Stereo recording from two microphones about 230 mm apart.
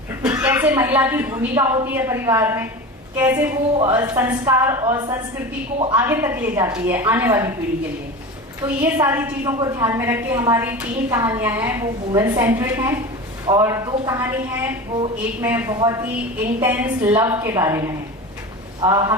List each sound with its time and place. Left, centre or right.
0.2 s a woman's voice: centre
3.8 s a woman's voice: right
4.0 s a woman's voice: centre
8.6 s a woman's voice: centre